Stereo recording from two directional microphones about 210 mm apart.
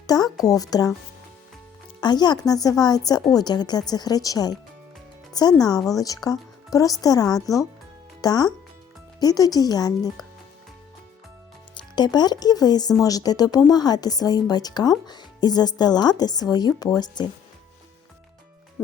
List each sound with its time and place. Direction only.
0.1 s music: 15° left (ahead or behind)
0.4 s speech: 15° left (ahead or behind)
2.0 s speech: 20° left (ahead or behind)
11.7 s speech: 20° left (ahead or behind)